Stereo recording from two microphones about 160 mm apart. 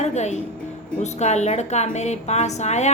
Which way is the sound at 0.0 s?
45° left (ahead or behind).